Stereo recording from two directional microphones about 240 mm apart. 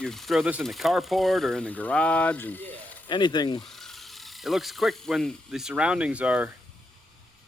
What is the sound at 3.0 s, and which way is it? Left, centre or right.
Speech, centre.